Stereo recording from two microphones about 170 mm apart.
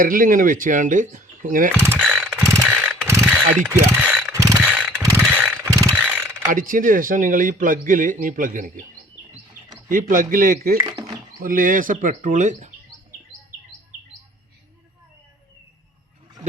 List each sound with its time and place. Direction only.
0.0 s a man's voice: 55° right (ahead or behind)
1.7 s speech: 15° right (ahead or behind)
2.1 s a sound: 10° right (ahead or behind)
2.6 s mechanisms: 5° right (ahead or behind)
3.7 s speech: 10° right (ahead or behind)
4.4 s mechanisms: 15° right (ahead or behind)
6.5 s a man's voice: 55° right (ahead or behind)
9.9 s speech: 55° right (ahead or behind)
10.8 s a sound: 20° right (ahead or behind)
11.4 s speech: 55° right (ahead or behind)